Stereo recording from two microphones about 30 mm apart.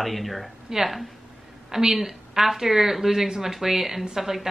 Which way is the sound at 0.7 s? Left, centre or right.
Centre.